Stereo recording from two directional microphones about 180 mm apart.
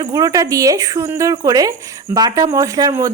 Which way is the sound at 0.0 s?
20° right (ahead or behind).